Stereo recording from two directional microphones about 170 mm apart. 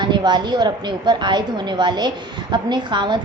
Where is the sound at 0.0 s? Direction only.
25° right (ahead or behind).